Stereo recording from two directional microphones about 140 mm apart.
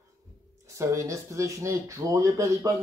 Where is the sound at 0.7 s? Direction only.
20° right (ahead or behind).